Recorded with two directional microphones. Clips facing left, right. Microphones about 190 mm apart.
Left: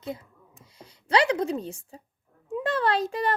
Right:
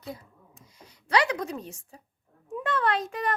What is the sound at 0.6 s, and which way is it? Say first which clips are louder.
A child's voice: left 6 dB; 30° left (ahead or behind).